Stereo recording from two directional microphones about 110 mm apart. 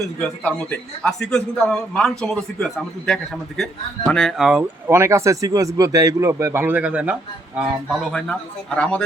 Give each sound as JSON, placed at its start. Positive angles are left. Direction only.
{"t": 0.0, "sound": "a man's voice", "side_deg": 10}
{"t": 4.4, "sound": "speech", "side_deg": -5}
{"t": 4.9, "sound": "speech", "side_deg": -25}
{"t": 7.6, "sound": "a man's voice", "side_deg": 0}